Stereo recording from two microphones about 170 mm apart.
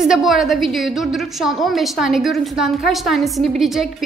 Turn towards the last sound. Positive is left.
turn(degrees=0)  # may be behind; listen again after turning